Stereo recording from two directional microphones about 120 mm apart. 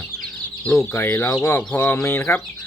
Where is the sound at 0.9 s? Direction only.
20° left (ahead or behind).